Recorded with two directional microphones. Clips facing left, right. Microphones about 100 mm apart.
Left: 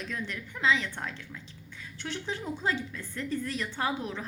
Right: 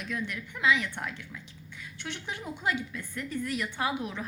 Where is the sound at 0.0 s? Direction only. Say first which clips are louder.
Right 1 dB; 35° left (ahead or behind).